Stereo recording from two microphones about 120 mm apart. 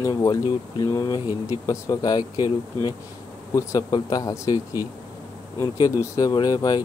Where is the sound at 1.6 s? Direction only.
25° left (ahead or behind).